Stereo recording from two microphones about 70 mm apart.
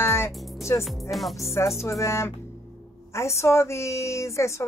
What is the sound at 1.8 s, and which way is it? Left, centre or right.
A woman's voice, left.